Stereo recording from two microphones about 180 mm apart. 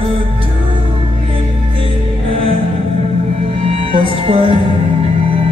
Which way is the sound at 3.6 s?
30° right (ahead or behind).